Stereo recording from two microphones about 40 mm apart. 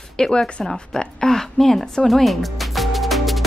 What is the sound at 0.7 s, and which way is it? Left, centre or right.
Music, centre.